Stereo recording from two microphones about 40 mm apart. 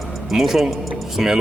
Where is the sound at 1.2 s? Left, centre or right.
Centre.